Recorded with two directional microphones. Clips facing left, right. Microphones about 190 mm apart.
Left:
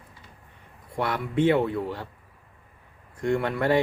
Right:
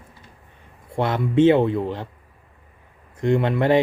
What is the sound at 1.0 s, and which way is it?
Speech, 25° right (ahead or behind).